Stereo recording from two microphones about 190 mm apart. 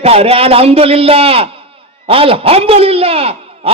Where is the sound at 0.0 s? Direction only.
30° right (ahead or behind).